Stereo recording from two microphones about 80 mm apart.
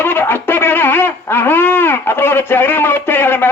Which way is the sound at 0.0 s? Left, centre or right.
Left.